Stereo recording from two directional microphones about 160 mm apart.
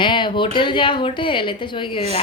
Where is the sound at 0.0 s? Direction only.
30° left (ahead or behind).